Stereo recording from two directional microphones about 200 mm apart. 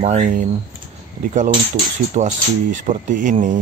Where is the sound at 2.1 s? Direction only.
40° right (ahead or behind).